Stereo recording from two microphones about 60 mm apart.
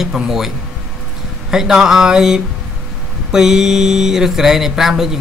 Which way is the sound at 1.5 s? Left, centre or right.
Centre.